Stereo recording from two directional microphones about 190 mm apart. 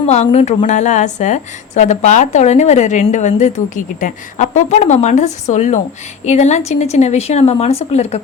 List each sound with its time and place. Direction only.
0.1 s a woman's voice: 35° left (ahead or behind)